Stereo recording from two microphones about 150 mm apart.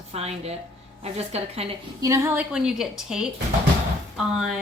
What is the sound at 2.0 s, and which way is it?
Speech, 20° right (ahead or behind).